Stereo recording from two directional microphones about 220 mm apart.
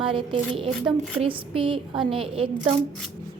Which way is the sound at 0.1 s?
20° right (ahead or behind).